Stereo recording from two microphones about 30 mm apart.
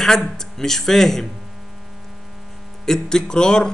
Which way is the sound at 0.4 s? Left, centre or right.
Centre.